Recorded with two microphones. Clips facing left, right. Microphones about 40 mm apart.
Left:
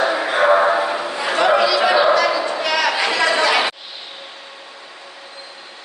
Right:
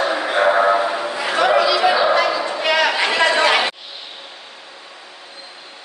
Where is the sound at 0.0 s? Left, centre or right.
Centre.